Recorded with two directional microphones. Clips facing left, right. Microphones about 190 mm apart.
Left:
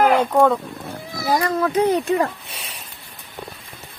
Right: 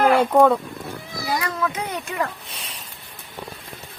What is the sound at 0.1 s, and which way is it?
Speech, 10° right (ahead or behind).